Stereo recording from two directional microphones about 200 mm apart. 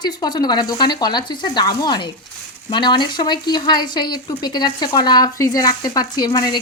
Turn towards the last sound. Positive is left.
turn(degrees=20)  # may be behind; listen again after turning